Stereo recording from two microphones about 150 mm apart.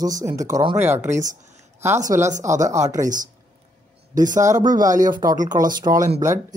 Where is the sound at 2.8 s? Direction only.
25° right (ahead or behind).